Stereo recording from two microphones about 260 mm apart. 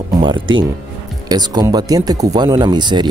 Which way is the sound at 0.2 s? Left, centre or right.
Centre.